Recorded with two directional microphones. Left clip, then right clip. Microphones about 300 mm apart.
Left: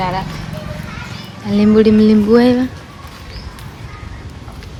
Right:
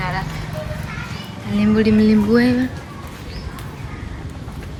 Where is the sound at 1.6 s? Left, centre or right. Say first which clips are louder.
Left 6 dB; centre.